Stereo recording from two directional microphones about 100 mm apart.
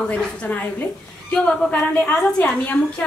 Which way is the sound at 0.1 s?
15° left (ahead or behind).